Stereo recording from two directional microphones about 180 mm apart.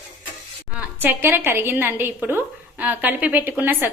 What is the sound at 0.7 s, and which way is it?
A woman's voice, 10° right (ahead or behind).